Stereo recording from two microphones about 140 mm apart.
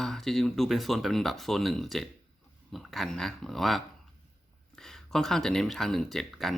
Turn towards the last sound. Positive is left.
turn(degrees=0)  # may be behind; listen again after turning